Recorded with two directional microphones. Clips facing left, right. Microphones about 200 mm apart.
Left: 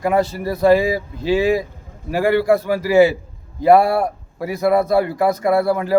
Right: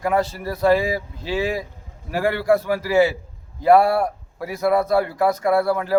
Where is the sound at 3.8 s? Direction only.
Centre (ahead or behind).